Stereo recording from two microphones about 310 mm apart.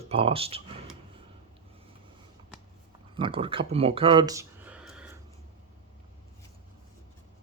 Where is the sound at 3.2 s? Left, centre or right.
Centre.